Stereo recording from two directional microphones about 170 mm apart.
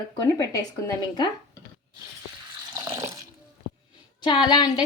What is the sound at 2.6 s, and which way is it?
Water, 20° right (ahead or behind).